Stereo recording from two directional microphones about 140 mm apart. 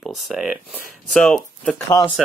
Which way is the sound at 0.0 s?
Centre (ahead or behind).